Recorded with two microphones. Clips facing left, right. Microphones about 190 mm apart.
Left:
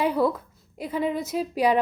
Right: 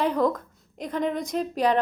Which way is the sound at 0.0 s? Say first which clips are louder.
Even; 10° left (ahead or behind).